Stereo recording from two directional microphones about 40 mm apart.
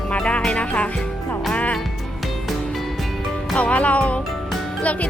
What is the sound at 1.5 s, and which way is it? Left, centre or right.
Music, left.